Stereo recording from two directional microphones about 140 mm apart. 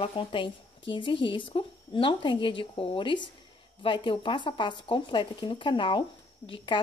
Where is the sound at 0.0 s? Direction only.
40° left (ahead or behind).